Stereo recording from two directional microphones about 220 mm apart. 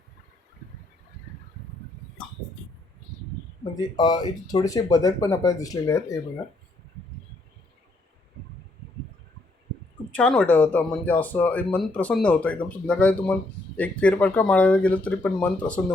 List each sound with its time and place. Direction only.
3.6 s speech: 15° left (ahead or behind)
10.1 s speech: 5° left (ahead or behind)